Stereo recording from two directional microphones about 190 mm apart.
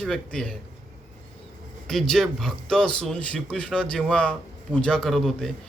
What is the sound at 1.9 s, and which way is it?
Speech, centre (ahead or behind).